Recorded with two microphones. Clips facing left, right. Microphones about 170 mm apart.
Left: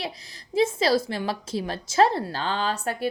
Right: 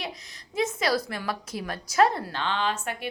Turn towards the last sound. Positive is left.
turn(degrees=35)  # may be behind; listen again after turning